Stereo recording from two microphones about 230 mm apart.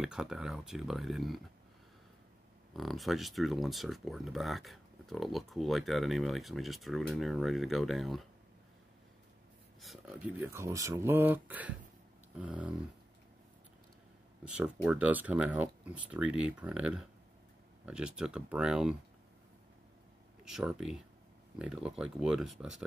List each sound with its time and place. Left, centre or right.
0.0 s speech: centre
2.7 s speech: centre
9.8 s speech: centre
14.4 s speech: centre
20.4 s speech: centre